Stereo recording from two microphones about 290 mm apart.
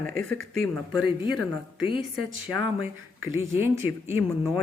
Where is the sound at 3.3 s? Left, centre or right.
Centre.